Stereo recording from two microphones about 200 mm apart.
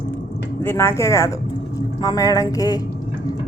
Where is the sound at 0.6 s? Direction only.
10° left (ahead or behind).